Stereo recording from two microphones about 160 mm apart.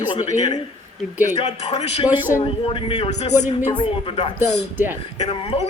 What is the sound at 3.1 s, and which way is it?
Speech, 45° left (ahead or behind).